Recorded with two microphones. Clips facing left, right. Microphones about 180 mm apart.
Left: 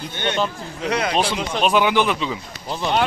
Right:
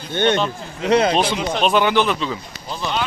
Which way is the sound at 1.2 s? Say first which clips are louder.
Right 2 dB; 5° left (ahead or behind).